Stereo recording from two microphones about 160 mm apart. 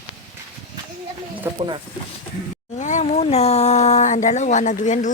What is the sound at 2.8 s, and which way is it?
Speech, 50° left (ahead or behind).